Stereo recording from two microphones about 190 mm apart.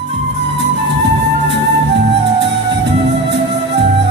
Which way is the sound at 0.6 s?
65° right (ahead or behind).